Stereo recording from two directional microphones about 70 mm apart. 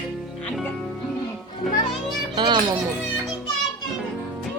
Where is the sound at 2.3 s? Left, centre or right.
Right.